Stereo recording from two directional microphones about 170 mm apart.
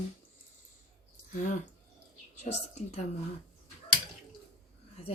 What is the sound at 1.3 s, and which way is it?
Speech, 50° left (ahead or behind).